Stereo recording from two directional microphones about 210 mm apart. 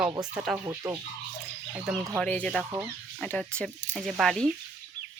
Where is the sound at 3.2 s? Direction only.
5° left (ahead or behind).